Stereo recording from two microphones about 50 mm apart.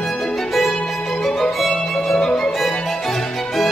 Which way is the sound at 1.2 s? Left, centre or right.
Centre.